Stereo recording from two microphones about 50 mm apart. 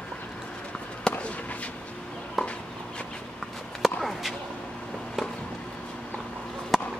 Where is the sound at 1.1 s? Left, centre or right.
Centre.